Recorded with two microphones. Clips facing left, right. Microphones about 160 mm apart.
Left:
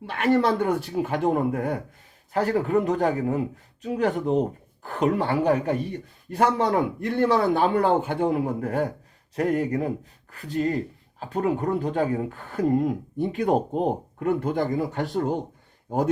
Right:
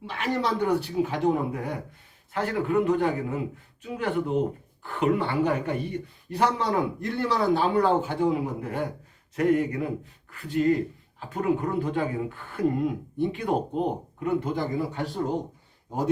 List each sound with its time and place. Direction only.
0.0 s speech: 55° left (ahead or behind)
2.3 s a man's voice: 40° left (ahead or behind)
6.3 s speech: 50° left (ahead or behind)